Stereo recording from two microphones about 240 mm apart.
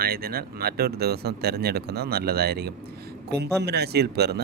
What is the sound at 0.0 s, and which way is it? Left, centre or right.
Speech, right.